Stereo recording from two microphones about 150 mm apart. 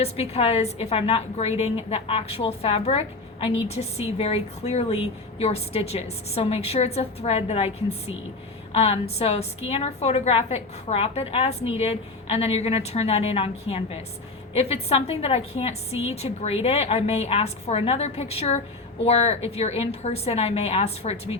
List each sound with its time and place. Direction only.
0.0 s a woman's voice: 45° left (ahead or behind)